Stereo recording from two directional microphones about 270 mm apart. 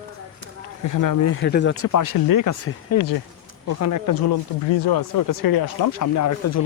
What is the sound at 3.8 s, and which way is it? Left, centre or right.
Speech, left.